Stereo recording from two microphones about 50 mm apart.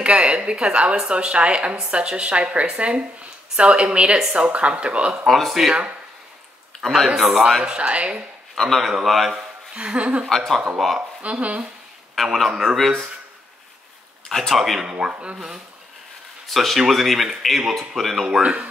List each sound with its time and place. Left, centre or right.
0.0 s a woman's voice: right
5.2 s speech: centre
7.2 s speech: centre
7.6 s a woman's voice: right
8.5 s speech: centre
9.8 s a woman's voice: right
10.2 s speech: centre
11.0 s a woman's voice: right
12.4 s speech: centre
14.3 s speech: centre
14.8 s speech: centre
16.4 s speech: centre
18.4 s a woman's voice: right